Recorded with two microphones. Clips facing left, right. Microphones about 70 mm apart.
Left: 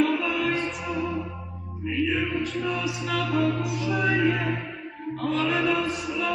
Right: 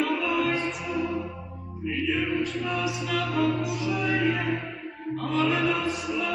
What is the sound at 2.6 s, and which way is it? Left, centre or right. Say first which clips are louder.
Music: left 1 dB; centre.